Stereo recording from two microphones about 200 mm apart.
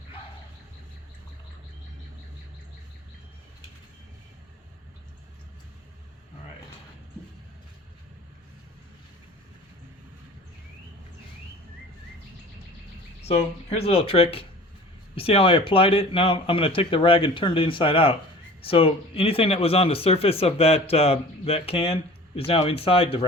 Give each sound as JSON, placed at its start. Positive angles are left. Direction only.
{"t": 13.2, "sound": "speech", "side_deg": 30}